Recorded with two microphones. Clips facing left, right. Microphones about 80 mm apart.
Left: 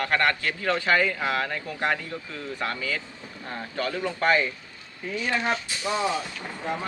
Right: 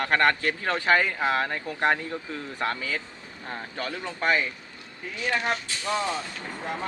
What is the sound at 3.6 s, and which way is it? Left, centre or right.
Speech, centre.